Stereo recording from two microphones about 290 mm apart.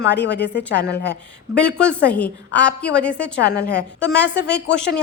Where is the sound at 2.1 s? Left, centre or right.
Centre.